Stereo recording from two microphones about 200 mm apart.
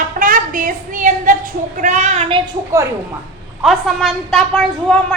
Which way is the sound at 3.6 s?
Centre (ahead or behind).